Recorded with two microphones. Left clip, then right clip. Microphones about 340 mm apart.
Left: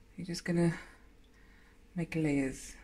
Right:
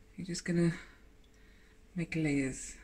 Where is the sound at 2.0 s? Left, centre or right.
Centre.